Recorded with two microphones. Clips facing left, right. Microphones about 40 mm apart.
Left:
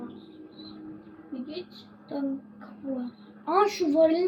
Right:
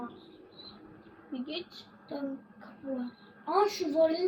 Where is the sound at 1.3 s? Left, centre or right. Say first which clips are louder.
Left 1 dB; right.